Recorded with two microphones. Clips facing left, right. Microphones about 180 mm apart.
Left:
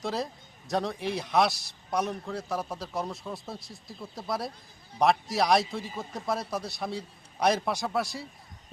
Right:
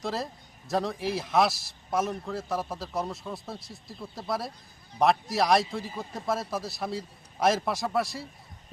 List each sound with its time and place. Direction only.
0.0 s a man's voice: centre (ahead or behind)